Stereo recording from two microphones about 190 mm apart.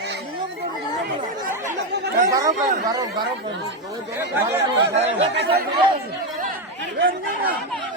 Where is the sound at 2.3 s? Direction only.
20° right (ahead or behind).